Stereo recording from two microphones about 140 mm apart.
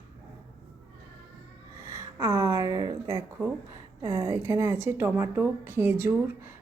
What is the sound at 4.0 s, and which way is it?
A woman's voice, 20° right (ahead or behind).